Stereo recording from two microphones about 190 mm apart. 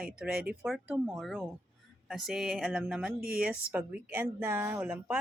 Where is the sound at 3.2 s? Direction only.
50° right (ahead or behind).